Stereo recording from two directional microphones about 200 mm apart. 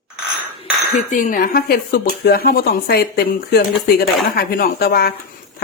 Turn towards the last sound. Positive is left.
turn(degrees=50)  # may be behind; listen again after turning